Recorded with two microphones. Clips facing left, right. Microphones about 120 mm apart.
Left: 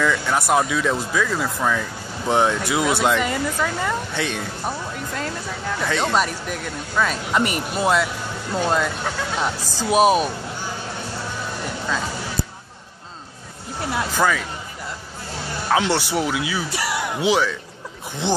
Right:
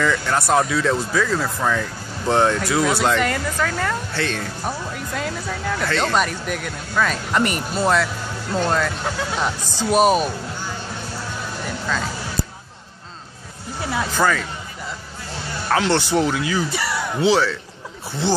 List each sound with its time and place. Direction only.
0.0 s speech: 5° left (ahead or behind)
2.9 s speech: centre (ahead or behind)
4.6 s speech: centre (ahead or behind)
5.9 s speech: 15° left (ahead or behind)
6.1 s speech: centre (ahead or behind)
14.1 s speech: 10° left (ahead or behind)
15.7 s speech: 10° left (ahead or behind)